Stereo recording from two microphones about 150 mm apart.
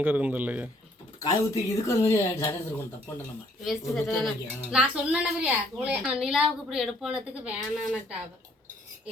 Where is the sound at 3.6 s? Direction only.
Centre (ahead or behind).